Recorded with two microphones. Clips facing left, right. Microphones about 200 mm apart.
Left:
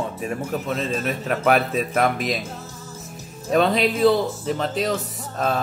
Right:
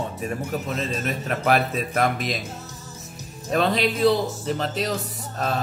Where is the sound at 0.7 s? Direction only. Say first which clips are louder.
Left 4 dB; centre (ahead or behind).